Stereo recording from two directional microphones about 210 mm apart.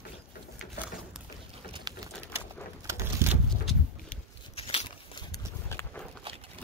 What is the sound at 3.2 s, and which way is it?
Vehicle, 10° right (ahead or behind).